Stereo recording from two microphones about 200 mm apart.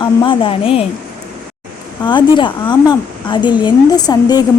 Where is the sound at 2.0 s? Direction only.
25° left (ahead or behind).